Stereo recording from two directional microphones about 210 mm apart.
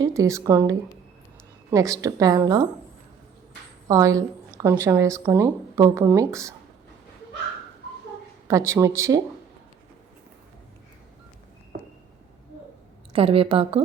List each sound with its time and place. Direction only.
0.0 s a woman's voice: 15° right (ahead or behind)
3.8 s a woman's voice: 15° right (ahead or behind)
8.4 s a woman's voice: 15° right (ahead or behind)
13.1 s a woman's voice: 25° right (ahead or behind)